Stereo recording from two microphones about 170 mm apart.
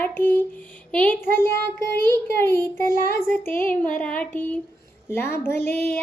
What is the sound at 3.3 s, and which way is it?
Speech, 15° left (ahead or behind).